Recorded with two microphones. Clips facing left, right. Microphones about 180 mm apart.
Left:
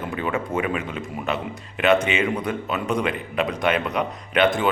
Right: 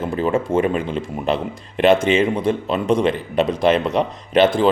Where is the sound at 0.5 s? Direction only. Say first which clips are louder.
Right 6 dB; 35° right (ahead or behind).